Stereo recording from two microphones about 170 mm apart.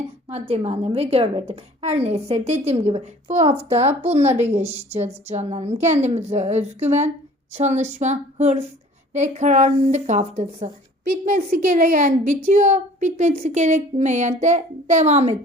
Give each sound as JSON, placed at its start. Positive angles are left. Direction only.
{"t": 0.3, "sound": "a woman's voice", "side_deg": -35}
{"t": 11.1, "sound": "a woman's voice", "side_deg": -55}